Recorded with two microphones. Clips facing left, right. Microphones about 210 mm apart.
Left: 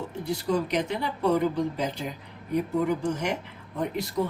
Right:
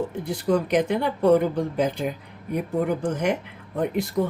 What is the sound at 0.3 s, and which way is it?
Speech, 55° right (ahead or behind).